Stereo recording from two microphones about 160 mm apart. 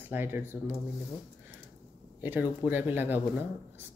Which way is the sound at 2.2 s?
10° right (ahead or behind).